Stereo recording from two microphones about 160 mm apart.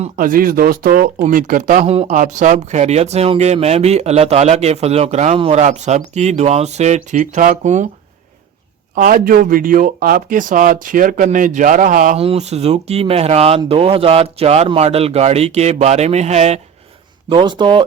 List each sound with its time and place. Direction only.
0.2 s speech: 60° right (ahead or behind)
9.0 s speech: 65° right (ahead or behind)
12.1 s speech: 40° right (ahead or behind)
17.2 s speech: 30° right (ahead or behind)